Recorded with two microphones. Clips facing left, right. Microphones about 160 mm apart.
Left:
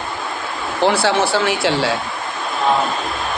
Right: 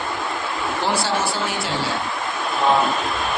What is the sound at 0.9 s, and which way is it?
Speech, 65° left (ahead or behind).